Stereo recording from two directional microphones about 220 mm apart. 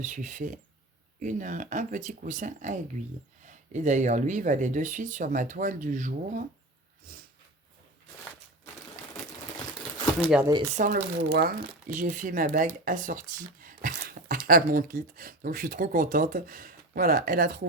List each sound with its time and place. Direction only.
0.0 s speech: 35° right (ahead or behind)
10.8 s speech: 35° right (ahead or behind)